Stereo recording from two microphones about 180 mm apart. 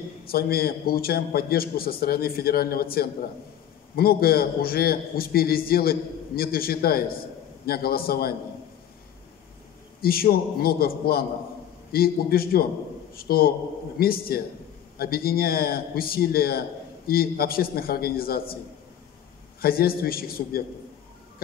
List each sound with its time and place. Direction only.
0.2 s a man's voice: 55° left (ahead or behind)
10.0 s a man's voice: 55° left (ahead or behind)
19.6 s a man's voice: 55° left (ahead or behind)